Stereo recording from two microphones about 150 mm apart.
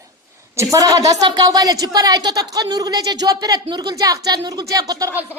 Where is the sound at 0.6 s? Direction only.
20° right (ahead or behind).